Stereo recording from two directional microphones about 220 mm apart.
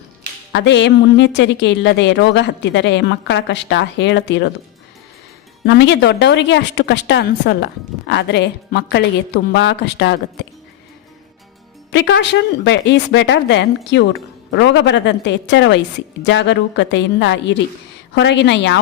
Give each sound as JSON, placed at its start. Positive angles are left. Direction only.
{"t": 0.5, "sound": "speech", "side_deg": 55}
{"t": 5.6, "sound": "speech", "side_deg": 50}
{"t": 11.9, "sound": "speech", "side_deg": 55}